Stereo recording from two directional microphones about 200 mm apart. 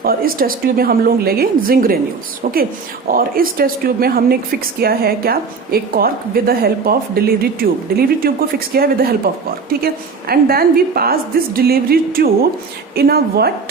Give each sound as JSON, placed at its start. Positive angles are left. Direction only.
{"t": 0.0, "sound": "a woman's voice", "side_deg": -50}
{"t": 3.1, "sound": "a woman's voice", "side_deg": -45}